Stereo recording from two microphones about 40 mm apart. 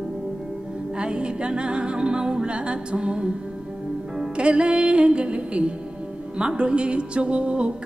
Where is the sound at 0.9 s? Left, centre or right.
Right.